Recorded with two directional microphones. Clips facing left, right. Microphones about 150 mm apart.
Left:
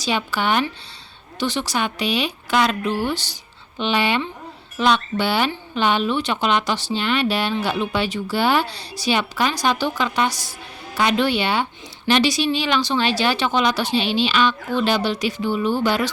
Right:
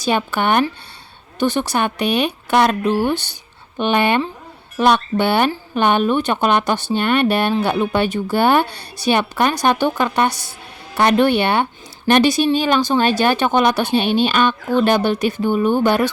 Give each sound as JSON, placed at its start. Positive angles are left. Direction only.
{"t": 0.0, "sound": "speech", "side_deg": -50}
{"t": 3.8, "sound": "speech", "side_deg": -50}